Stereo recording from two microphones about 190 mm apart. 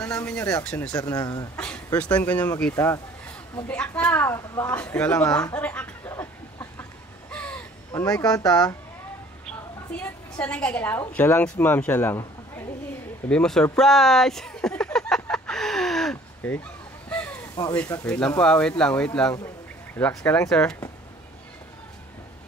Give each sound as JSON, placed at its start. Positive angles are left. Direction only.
{"t": 0.0, "sound": "speech", "side_deg": 5}
{"t": 0.9, "sound": "a woman's voice", "side_deg": 15}
{"t": 2.0, "sound": "a woman's voice", "side_deg": 5}
{"t": 3.6, "sound": "a sound", "side_deg": 5}
{"t": 9.9, "sound": "a woman's voice", "side_deg": 10}
{"t": 13.7, "sound": "a sound", "side_deg": 0}
{"t": 17.7, "sound": "a woman's voice", "side_deg": 10}